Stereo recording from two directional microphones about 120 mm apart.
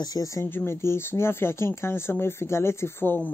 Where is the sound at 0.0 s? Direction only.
30° left (ahead or behind).